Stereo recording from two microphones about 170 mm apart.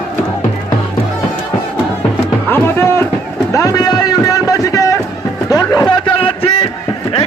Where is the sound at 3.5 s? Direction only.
20° left (ahead or behind).